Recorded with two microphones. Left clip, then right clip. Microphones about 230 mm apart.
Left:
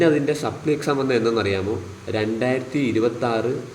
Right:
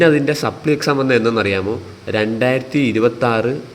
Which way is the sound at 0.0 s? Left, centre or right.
Right.